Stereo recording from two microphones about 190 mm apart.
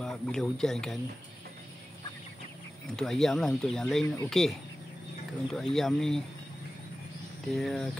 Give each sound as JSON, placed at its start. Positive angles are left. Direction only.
{"t": 0.0, "sound": "speech", "side_deg": 5}
{"t": 3.0, "sound": "speech", "side_deg": 0}
{"t": 7.4, "sound": "speech", "side_deg": 0}